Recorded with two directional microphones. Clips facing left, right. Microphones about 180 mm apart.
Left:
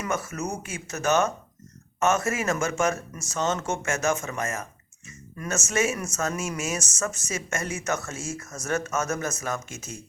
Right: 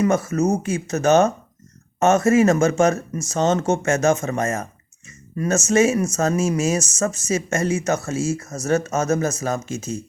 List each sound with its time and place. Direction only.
0.0 s speech: 35° right (ahead or behind)